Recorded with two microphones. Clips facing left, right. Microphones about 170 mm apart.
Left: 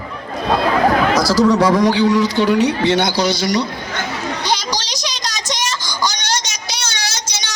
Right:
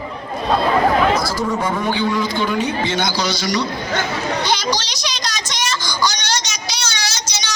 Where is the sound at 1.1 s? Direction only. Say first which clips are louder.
Left 6 dB; 90° left; by 3.6 s 55° left (ahead or behind).